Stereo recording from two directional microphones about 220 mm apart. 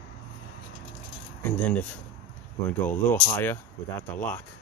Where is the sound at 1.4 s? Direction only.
10° left (ahead or behind).